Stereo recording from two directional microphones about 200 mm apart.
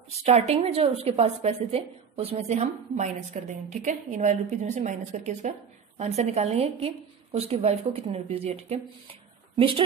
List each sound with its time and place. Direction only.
0.1 s a woman's voice: 30° right (ahead or behind)